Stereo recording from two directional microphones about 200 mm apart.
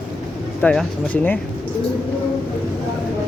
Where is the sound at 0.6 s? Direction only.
10° left (ahead or behind).